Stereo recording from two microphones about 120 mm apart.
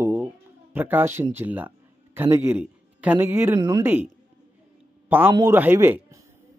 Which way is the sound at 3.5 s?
40° right (ahead or behind).